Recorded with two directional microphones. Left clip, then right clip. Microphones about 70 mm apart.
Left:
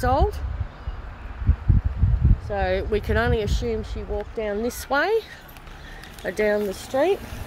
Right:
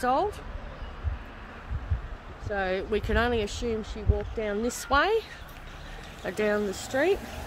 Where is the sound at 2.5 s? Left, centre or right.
Left; by 7.2 s centre.